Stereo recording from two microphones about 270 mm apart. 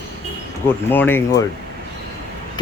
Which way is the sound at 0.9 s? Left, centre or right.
Centre.